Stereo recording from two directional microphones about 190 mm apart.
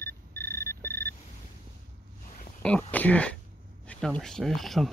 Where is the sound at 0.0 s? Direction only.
15° left (ahead or behind).